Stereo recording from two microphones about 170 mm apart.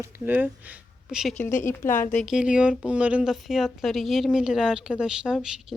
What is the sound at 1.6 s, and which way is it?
Speech, 15° left (ahead or behind).